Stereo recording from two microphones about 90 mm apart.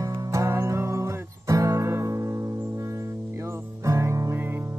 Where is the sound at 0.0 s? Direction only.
35° right (ahead or behind).